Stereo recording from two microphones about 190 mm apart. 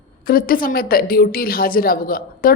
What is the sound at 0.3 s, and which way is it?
A woman's voice, 50° left (ahead or behind).